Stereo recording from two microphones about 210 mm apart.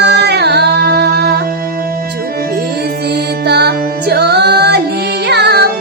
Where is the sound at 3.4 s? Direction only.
50° right (ahead or behind).